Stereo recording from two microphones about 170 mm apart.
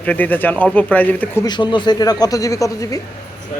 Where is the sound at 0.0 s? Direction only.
10° left (ahead or behind).